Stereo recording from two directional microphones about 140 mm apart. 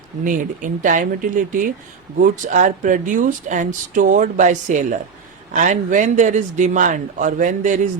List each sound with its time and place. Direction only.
0.3 s speech: 70° right (ahead or behind)